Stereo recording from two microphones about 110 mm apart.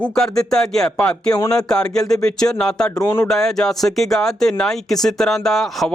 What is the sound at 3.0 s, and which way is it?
Speech, 20° left (ahead or behind).